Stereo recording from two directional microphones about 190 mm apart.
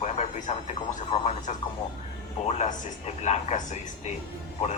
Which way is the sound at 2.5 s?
35° left (ahead or behind).